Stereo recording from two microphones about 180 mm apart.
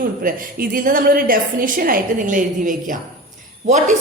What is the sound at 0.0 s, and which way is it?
A woman's voice, 55° right (ahead or behind).